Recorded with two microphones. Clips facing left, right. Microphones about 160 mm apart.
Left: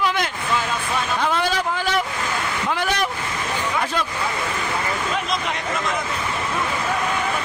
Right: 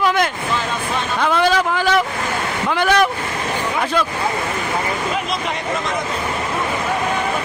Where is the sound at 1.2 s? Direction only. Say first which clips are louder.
Right 8 dB; 85° right.